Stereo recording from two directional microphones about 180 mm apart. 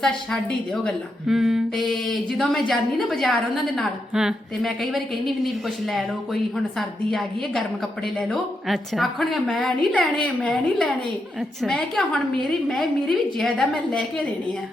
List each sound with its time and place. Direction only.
0.0 s a woman's voice: 5° left (ahead or behind)